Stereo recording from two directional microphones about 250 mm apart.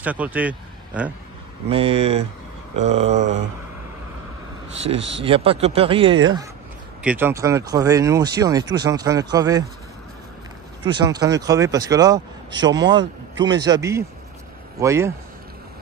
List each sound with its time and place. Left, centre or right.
0.0 s speech: centre
1.7 s speech: right
3.1 s a sound: right
4.8 s speech: right
7.0 s speech: centre
10.9 s speech: centre